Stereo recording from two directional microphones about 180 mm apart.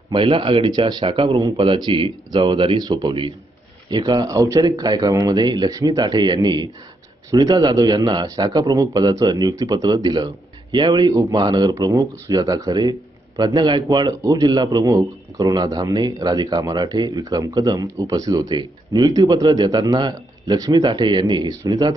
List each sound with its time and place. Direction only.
0.1 s a man's voice: 30° right (ahead or behind)